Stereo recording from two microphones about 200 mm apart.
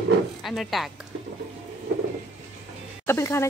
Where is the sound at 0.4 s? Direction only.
Centre (ahead or behind).